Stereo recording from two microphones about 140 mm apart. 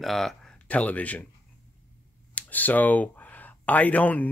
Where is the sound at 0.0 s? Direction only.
Centre (ahead or behind).